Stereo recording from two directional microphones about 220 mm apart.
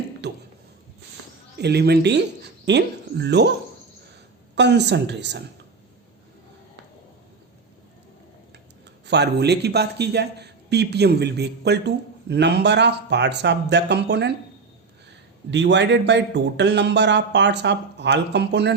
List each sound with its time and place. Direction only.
0.2 s a sound: 50° right (ahead or behind)
1.5 s speech: 50° right (ahead or behind)
4.5 s a man's voice: 50° right (ahead or behind)
9.0 s a man's voice: 50° right (ahead or behind)
15.4 s a man's voice: 55° right (ahead or behind)